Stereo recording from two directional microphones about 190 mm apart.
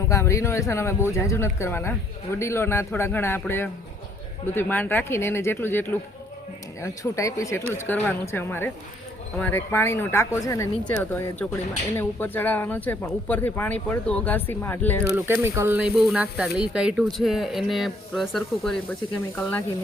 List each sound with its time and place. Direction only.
0.1 s speech: 15° left (ahead or behind)
15.0 s speech: 10° right (ahead or behind); by 19.6 s 10° left (ahead or behind)